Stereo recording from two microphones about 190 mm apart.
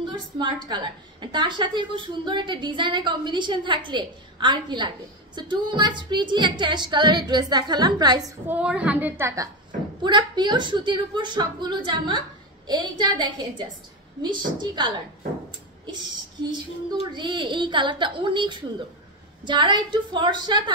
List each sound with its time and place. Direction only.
0.1 s a woman's voice: 25° right (ahead or behind)
8.2 s a woman's voice: 5° right (ahead or behind); by 15.0 s 25° right (ahead or behind)
17.1 s a woman's voice: 25° right (ahead or behind)